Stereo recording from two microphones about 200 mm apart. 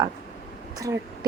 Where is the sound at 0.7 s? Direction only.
15° right (ahead or behind).